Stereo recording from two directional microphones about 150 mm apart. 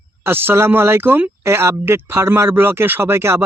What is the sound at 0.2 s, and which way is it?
Speech, 15° right (ahead or behind).